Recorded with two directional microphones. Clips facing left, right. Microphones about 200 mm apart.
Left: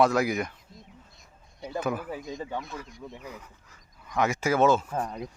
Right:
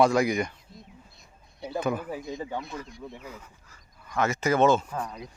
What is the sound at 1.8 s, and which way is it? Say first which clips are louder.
A man's voice: right 1 dB; 5° left (ahead or behind).